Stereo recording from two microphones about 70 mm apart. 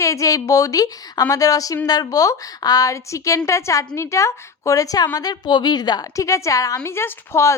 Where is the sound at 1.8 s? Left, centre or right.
Left.